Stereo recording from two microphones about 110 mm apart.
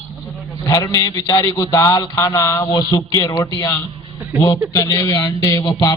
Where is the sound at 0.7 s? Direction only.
30° left (ahead or behind).